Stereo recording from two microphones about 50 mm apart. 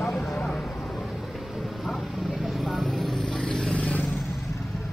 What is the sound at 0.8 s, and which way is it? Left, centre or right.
Thunder, centre.